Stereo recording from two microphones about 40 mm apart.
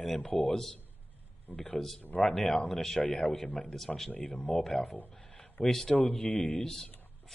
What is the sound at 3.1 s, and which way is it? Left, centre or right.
Speech, left.